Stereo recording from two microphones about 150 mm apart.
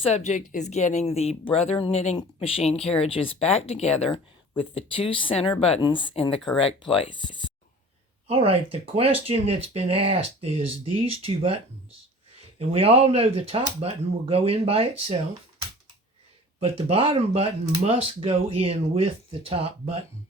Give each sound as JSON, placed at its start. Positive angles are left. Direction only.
{"t": 0.0, "sound": "speech", "side_deg": 45}
{"t": 8.3, "sound": "speech", "side_deg": -40}
{"t": 16.6, "sound": "speech", "side_deg": -40}